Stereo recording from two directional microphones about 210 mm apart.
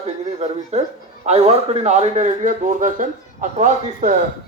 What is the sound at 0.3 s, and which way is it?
Speech, 30° right (ahead or behind).